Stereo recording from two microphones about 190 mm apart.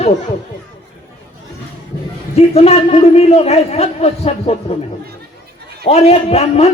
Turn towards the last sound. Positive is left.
turn(degrees=35)  # may be behind; listen again after turning